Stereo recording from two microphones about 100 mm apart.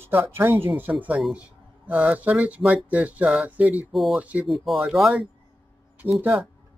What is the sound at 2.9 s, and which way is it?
Speech, 15° right (ahead or behind).